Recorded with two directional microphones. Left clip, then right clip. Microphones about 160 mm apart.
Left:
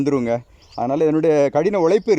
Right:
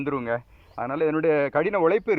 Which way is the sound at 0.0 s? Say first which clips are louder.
Left 7 dB; 40° left (ahead or behind).